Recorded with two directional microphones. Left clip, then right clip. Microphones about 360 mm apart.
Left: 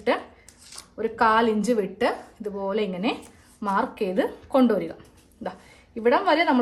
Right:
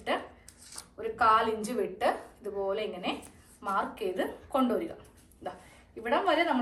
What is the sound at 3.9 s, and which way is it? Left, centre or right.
Speech, left.